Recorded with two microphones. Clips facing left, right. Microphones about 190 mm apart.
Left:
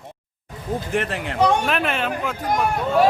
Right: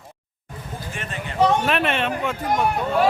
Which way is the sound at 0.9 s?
70° left (ahead or behind).